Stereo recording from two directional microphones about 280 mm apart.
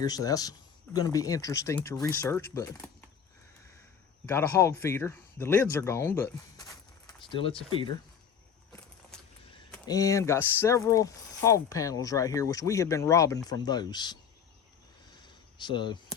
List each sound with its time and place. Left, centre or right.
0.0 s speech: centre
4.3 s speech: centre
9.8 s speech: centre
15.1 s a sound: centre